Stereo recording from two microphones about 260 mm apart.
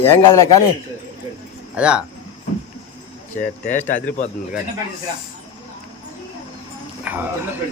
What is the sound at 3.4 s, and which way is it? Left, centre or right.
Speech, left.